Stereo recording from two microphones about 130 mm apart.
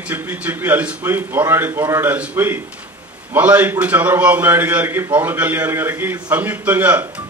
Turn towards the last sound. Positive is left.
turn(degrees=-15)  # may be behind; listen again after turning